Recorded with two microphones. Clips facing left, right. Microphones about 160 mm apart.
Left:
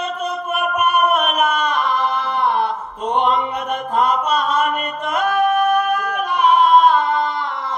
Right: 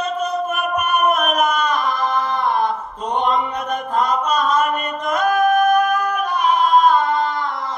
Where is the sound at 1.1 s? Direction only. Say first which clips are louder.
Even; 40° right (ahead or behind).